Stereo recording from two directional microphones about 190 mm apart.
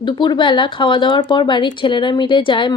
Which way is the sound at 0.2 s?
25° left (ahead or behind).